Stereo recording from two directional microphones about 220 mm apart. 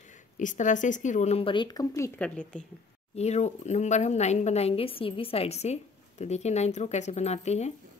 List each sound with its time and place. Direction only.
0.4 s speech: 35° left (ahead or behind); by 2.6 s 5° left (ahead or behind)
3.2 s speech: 30° left (ahead or behind)